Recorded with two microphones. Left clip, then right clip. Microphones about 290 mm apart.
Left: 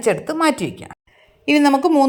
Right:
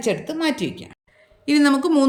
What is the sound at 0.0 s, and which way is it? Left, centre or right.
Speech, centre.